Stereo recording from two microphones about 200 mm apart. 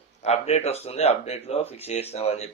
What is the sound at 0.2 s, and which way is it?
A man's voice, 35° left (ahead or behind).